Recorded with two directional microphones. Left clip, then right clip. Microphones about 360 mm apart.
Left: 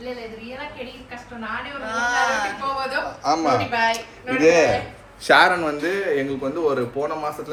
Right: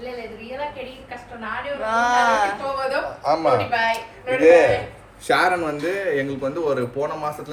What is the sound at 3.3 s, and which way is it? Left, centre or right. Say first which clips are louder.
Speech: right 1 dB; left.